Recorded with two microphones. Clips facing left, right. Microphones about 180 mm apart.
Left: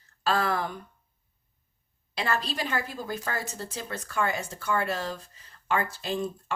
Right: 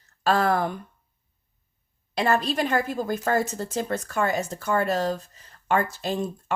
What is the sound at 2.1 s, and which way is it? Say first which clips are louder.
A woman's voice: right 7 dB; 45° right (ahead or behind).